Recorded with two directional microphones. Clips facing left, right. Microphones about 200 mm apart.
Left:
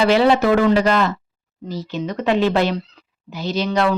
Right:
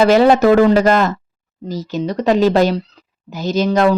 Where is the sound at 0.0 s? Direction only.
45° right (ahead or behind).